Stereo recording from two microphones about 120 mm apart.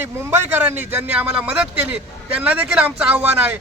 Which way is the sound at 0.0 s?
20° right (ahead or behind).